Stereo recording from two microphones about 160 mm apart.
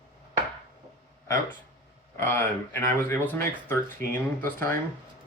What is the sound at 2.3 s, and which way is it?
Speech, 15° left (ahead or behind).